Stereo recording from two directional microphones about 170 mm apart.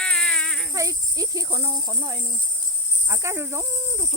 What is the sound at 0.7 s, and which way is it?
Speech, 20° right (ahead or behind).